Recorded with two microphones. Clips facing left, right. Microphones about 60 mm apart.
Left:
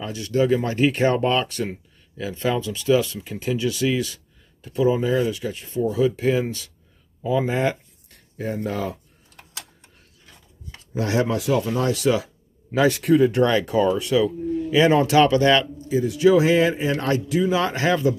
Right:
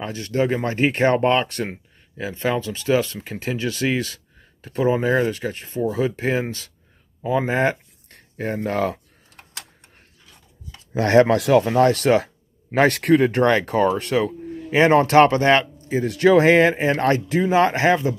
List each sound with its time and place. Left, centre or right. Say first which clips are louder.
0.0 s speech: left 1 dB; right
7.2 s a sound: right 2 dB; right
8.6 s speech: right 4 dB; right
11.0 s speech: right 7 dB; right
13.4 s speech: right 1 dB; right
16.0 s speech: right 2 dB; right